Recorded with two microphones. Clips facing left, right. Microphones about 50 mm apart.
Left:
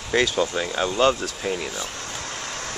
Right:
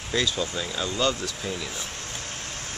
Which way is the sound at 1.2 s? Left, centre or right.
Left.